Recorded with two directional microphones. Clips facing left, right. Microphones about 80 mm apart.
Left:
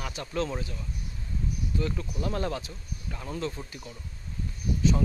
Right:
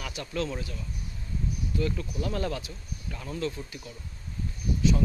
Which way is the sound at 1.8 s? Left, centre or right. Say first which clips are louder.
Right 2 dB; left.